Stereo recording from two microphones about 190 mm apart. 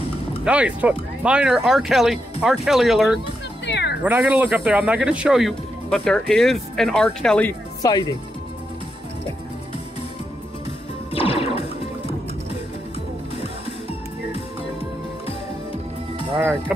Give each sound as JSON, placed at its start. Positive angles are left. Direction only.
{"t": 0.5, "sound": "speech", "side_deg": -5}
{"t": 3.6, "sound": "music", "side_deg": 65}
{"t": 4.0, "sound": "speech", "side_deg": -10}
{"t": 7.8, "sound": "speech", "side_deg": 20}
{"t": 11.1, "sound": "music", "side_deg": 30}
{"t": 13.4, "sound": "music", "side_deg": 30}
{"t": 16.3, "sound": "speech", "side_deg": -10}